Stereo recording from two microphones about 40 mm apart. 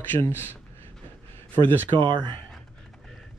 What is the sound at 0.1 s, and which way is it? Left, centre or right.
Speech, left.